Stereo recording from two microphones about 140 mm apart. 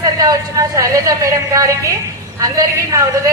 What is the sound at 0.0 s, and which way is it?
A woman's voice, 25° right (ahead or behind).